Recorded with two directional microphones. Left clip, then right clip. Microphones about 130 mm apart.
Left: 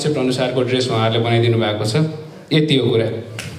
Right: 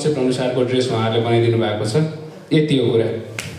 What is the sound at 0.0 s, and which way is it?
A man's voice, 25° left (ahead or behind).